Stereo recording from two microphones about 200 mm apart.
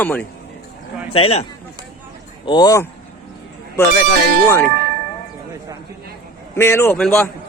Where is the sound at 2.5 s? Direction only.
20° left (ahead or behind).